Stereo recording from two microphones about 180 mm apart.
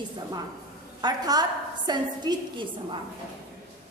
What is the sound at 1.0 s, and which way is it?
A woman's voice, 20° right (ahead or behind).